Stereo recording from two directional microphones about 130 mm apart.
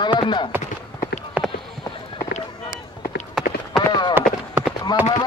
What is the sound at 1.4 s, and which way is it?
Clip-clop, 10° right (ahead or behind).